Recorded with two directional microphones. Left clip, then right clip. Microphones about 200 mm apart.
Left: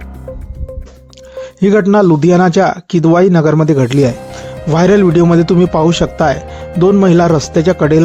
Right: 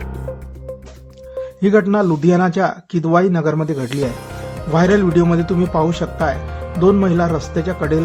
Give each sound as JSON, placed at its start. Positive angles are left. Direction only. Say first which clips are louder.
{"t": 1.6, "sound": "speech", "louder": "left 6 dB", "side_deg": 35}